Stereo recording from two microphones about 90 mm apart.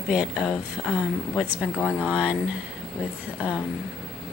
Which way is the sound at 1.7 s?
15° left (ahead or behind).